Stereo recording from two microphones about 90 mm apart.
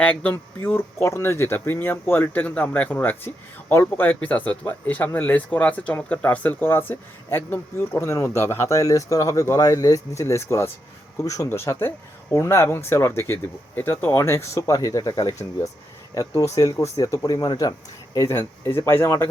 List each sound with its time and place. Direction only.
0.0 s speech: 15° left (ahead or behind); by 11.4 s 40° left (ahead or behind)
11.4 s speech: 30° left (ahead or behind)
14.7 s speech: 45° left (ahead or behind)
18.3 s speech: 30° left (ahead or behind)